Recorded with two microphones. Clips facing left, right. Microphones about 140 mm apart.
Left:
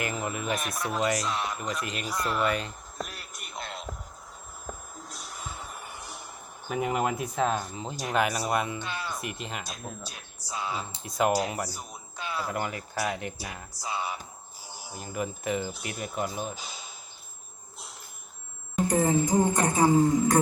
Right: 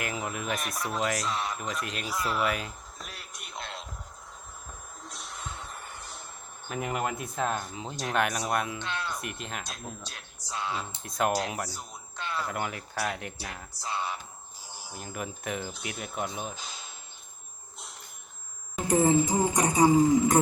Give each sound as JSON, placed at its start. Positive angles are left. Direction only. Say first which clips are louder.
{"t": 0.0, "sound": "speech", "louder": "left 2 dB", "side_deg": 0}
{"t": 3.1, "sound": "radio", "louder": "left 1 dB", "side_deg": 0}
{"t": 5.0, "sound": "vehicle", "louder": "even", "side_deg": 5}
{"t": 6.7, "sound": "speech", "louder": "left 4 dB", "side_deg": 5}
{"t": 14.9, "sound": "speech", "louder": "left 4 dB", "side_deg": 0}
{"t": 18.9, "sound": "a man's voice", "louder": "right 2 dB", "side_deg": -20}